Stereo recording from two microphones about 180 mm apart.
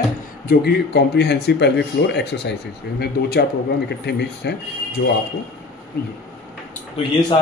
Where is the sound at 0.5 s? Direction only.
65° left (ahead or behind).